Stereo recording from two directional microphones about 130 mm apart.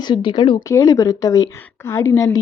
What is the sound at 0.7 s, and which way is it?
Speech, 25° left (ahead or behind).